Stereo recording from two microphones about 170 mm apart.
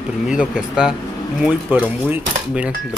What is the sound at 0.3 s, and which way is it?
Speech, 5° right (ahead or behind).